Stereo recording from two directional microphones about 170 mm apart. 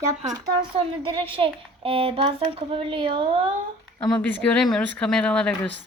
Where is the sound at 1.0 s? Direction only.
30° right (ahead or behind).